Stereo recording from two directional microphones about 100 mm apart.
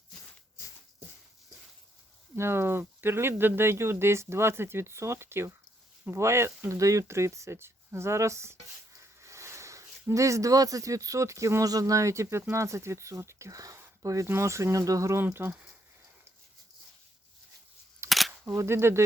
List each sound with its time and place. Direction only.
2.3 s speech: 25° right (ahead or behind)
18.1 s single-lens reflex camera: centre (ahead or behind)
18.4 s speech: 25° right (ahead or behind)